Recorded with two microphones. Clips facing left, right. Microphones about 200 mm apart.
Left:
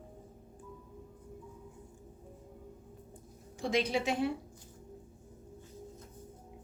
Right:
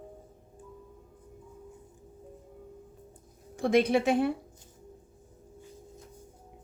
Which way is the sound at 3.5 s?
55° right (ahead or behind).